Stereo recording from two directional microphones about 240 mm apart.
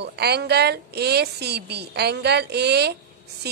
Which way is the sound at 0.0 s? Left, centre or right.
Right.